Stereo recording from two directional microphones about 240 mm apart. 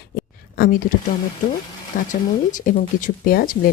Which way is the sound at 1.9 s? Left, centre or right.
Left.